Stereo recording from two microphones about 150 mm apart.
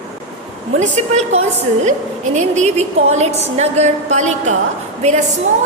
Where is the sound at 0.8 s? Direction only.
50° right (ahead or behind).